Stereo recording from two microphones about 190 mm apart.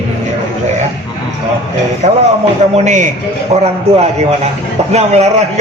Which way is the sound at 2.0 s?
40° right (ahead or behind).